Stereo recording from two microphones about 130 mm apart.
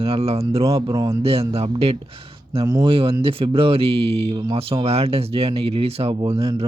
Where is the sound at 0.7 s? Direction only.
35° right (ahead or behind).